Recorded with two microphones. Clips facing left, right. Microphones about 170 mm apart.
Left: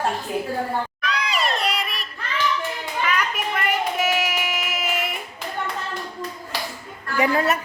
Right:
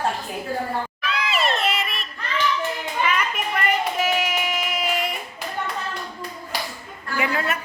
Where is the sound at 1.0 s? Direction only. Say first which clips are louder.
Right 3 dB; 5° right (ahead or behind).